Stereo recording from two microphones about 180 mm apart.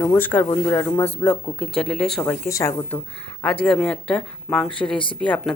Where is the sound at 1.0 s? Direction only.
10° left (ahead or behind).